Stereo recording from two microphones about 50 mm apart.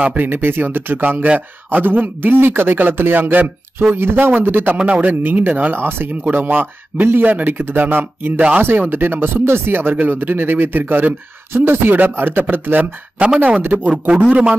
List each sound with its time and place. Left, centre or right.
0.0 s a man's voice: right
4.0 s a man's voice: right
4.8 s speech: right
5.7 s a man's voice: right
8.4 s a man's voice: right
8.6 s a man's voice: right
11.5 s a man's voice: right
13.2 s a man's voice: right